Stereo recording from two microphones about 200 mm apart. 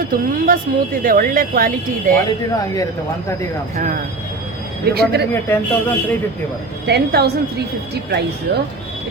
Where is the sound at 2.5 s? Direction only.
15° left (ahead or behind).